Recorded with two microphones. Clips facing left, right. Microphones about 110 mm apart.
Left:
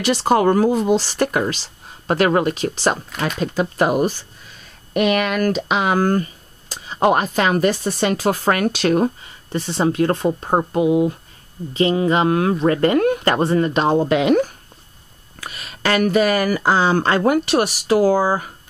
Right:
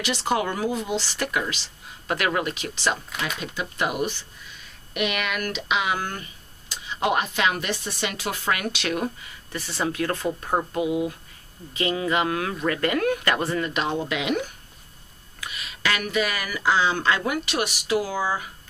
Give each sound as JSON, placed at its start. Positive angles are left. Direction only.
{"t": 0.0, "sound": "speech", "side_deg": 40}